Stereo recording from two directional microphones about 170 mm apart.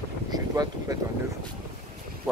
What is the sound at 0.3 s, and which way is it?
Boat, 20° right (ahead or behind).